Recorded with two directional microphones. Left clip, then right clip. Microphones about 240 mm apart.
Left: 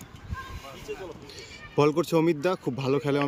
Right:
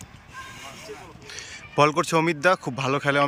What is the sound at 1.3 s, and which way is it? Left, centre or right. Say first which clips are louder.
A man's voice: right 4 dB; centre.